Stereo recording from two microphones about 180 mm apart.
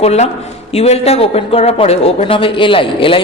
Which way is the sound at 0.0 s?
35° left (ahead or behind).